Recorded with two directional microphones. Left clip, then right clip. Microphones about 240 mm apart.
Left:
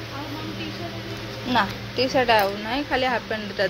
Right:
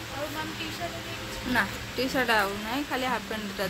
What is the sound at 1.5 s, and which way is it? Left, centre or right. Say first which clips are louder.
Speech: left 5 dB; centre.